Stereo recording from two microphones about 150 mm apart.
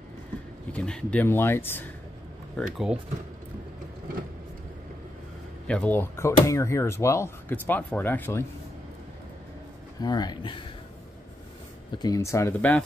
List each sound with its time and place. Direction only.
0.7 s speech: 5° left (ahead or behind)
2.5 s speech: centre (ahead or behind)
5.7 s speech: 10° left (ahead or behind)
9.9 s speech: 25° left (ahead or behind)
11.9 s speech: 25° left (ahead or behind)